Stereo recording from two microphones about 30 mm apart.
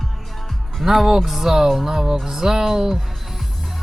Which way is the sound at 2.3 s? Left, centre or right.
Centre.